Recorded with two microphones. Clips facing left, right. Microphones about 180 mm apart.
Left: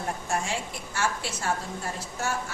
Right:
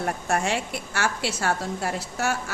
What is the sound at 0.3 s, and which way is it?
A woman's voice, 70° right (ahead or behind).